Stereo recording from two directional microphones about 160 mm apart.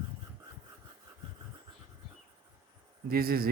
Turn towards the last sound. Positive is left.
turn(degrees=-70)  # may be behind; listen again after turning